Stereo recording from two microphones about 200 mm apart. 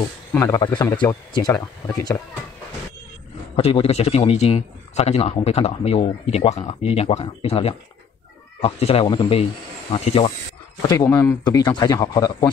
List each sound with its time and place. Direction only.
0.3 s a man's voice: 15° left (ahead or behind)
3.5 s a man's voice: 30° left (ahead or behind)
10.8 s a man's voice: 15° left (ahead or behind)